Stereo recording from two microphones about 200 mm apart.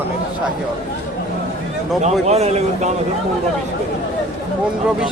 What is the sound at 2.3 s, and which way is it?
Speech, 30° right (ahead or behind).